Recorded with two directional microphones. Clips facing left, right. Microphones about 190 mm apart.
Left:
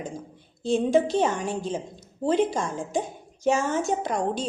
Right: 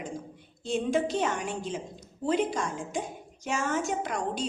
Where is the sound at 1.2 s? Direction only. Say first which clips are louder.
Left 5 dB; 30° left (ahead or behind).